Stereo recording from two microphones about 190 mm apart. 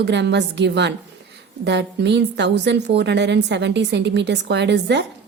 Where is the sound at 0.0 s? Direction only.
65° right (ahead or behind).